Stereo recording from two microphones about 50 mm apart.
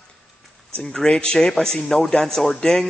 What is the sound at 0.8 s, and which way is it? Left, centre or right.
Speech, centre.